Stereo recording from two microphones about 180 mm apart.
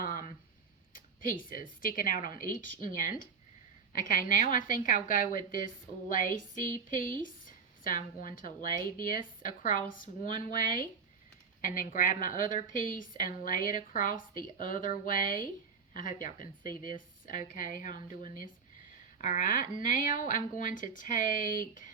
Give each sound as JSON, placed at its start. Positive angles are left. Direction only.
{"t": 0.0, "sound": "a sound", "side_deg": 50}
{"t": 0.9, "sound": "a woman's voice", "side_deg": 50}
{"t": 19.2, "sound": "a woman's voice", "side_deg": 45}